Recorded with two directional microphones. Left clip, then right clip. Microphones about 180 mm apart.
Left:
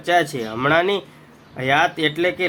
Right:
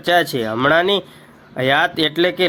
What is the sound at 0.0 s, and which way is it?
Speech, 25° right (ahead or behind).